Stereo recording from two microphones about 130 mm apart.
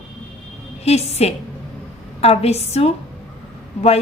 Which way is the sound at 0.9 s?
55° left (ahead or behind).